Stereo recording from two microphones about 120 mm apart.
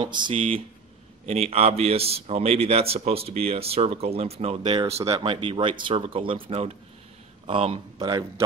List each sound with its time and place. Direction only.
0.0 s a man's voice: 40° right (ahead or behind); by 5.1 s 55° right (ahead or behind)
5.1 s speech: 45° right (ahead or behind)
8.1 s a man's voice: 25° right (ahead or behind)